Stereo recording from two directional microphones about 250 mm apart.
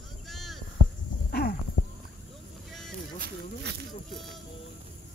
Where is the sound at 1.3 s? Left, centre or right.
Left.